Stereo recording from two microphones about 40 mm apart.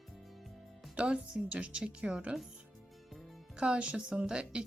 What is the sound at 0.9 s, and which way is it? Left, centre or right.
Speech, right.